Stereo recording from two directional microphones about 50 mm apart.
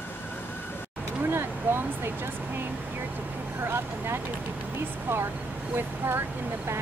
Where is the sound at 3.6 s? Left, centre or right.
Right.